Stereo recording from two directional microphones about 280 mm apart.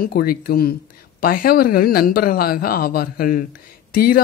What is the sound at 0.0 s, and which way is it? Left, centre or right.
Speech, left.